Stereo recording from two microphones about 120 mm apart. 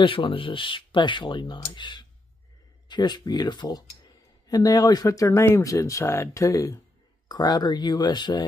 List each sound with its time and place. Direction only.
0.0 s speech: 45° left (ahead or behind)